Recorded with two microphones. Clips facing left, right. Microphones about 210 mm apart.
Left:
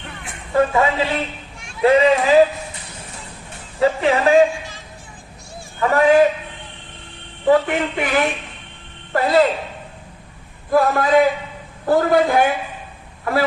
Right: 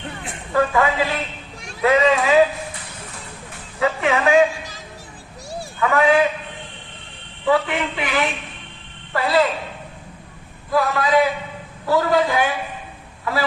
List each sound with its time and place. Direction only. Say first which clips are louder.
0.5 s a woman's voice: left 2 dB; 25° left (ahead or behind)
3.8 s speech: left 3 dB; 35° left (ahead or behind)
5.8 s speech: left 3 dB; 40° left (ahead or behind)
7.4 s a woman's voice: left 4 dB; 45° left (ahead or behind)
10.7 s a woman's voice: left 3 dB; 50° left (ahead or behind)